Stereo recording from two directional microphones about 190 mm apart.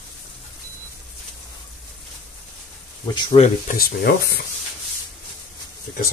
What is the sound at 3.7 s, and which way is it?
Speech, 50° left (ahead or behind).